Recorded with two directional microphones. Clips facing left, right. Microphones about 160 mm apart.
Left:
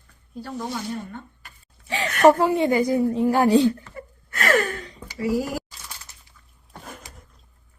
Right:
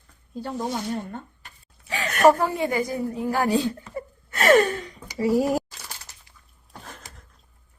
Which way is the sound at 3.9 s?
25° right (ahead or behind).